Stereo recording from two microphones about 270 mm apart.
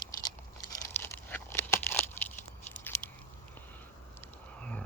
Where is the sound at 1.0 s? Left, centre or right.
Centre.